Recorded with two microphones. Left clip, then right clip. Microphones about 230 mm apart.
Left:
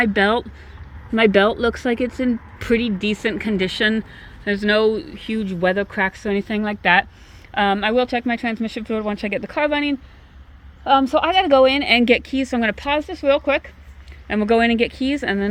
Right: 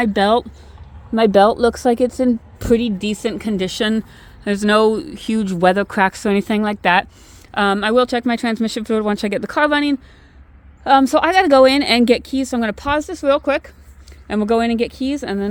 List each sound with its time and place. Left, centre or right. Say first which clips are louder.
0.0 s speech: right 2 dB; right
1.9 s speech: right 5 dB; right
3.8 s speech: even; right
12.0 s speech: right 1 dB; right
14.3 s speech: even; centre